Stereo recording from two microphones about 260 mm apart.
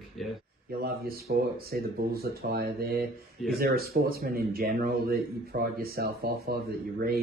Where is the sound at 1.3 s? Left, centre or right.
Right.